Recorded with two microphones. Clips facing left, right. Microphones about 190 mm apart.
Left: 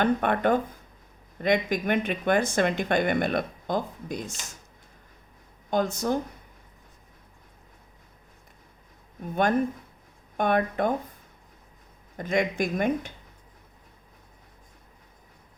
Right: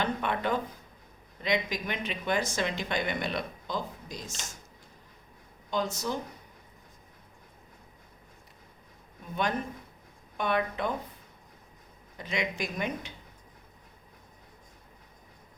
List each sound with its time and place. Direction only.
0.0 s speech: 50° left (ahead or behind)
5.7 s speech: 55° left (ahead or behind)
9.3 s speech: 50° left (ahead or behind)
12.1 s speech: 50° left (ahead or behind)